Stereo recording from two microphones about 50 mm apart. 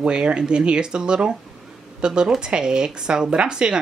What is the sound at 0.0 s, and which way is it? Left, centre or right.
Speech, centre.